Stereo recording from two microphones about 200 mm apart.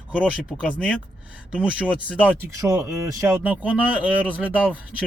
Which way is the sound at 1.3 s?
5° right (ahead or behind).